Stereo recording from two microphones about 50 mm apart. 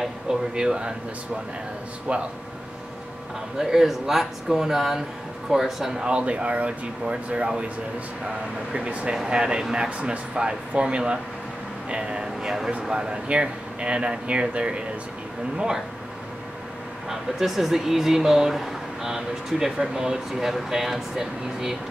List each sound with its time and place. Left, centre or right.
0.0 s speech: centre
3.5 s speech: centre
6.0 s speech: right
8.7 s speech: right
9.1 s speech: centre
9.8 s speech: right
17.1 s speech: centre